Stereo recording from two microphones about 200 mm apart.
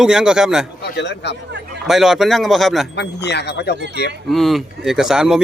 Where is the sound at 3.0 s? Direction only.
55° left (ahead or behind).